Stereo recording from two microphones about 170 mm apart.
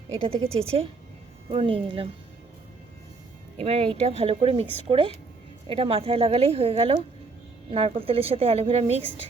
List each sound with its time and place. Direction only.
0.1 s a woman's voice: 35° right (ahead or behind)
3.6 s a woman's voice: 35° right (ahead or behind)